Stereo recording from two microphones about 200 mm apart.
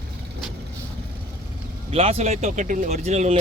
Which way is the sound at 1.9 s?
30° right (ahead or behind).